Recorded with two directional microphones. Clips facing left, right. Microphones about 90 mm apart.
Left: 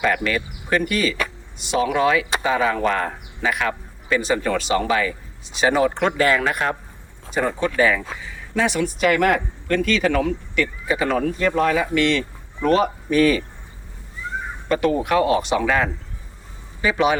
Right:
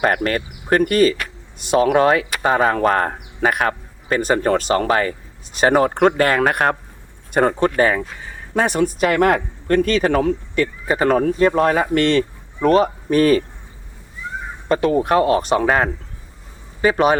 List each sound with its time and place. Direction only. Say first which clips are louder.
0.0 s speech: right 3 dB; 45° right (ahead or behind)
14.7 s speech: right 3 dB; 35° right (ahead or behind)
16.8 s speech: right 4 dB; 45° right (ahead or behind)